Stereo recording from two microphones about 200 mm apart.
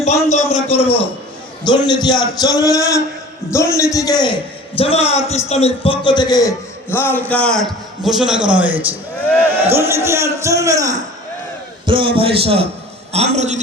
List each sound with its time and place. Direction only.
0.0 s a man's voice: 35° left (ahead or behind)
1.6 s a man's voice: 20° left (ahead or behind); by 13.6 s 35° right (ahead or behind)